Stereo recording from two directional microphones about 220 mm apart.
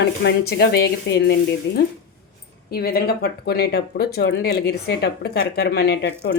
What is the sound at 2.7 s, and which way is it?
Speech, 45° left (ahead or behind).